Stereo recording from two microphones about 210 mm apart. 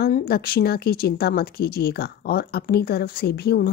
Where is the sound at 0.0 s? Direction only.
45° left (ahead or behind).